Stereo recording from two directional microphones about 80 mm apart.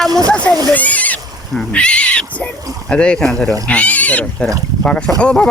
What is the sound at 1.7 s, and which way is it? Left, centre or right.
Speech, centre.